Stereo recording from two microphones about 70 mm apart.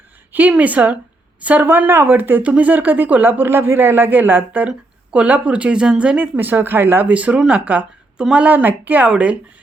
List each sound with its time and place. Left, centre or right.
0.3 s speech: right
8.4 s speech: right